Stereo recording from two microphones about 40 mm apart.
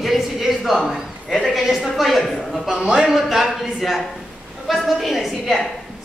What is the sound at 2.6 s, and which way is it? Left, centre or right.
Speech, centre.